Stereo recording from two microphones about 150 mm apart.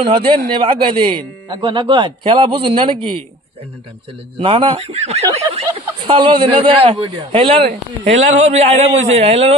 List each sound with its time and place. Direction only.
0.0 s a man's voice: 35° right (ahead or behind)
4.4 s a man's voice: 40° right (ahead or behind)
6.0 s a man's voice: 35° right (ahead or behind)